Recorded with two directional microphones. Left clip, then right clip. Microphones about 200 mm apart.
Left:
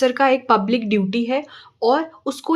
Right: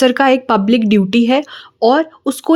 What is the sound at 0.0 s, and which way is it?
Speech, 40° right (ahead or behind).